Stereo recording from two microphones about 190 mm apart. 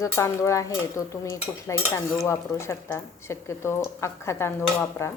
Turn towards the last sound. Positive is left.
turn(degrees=15)  # may be behind; listen again after turning